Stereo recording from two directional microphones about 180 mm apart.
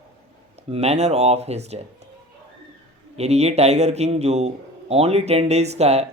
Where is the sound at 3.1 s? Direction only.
35° right (ahead or behind).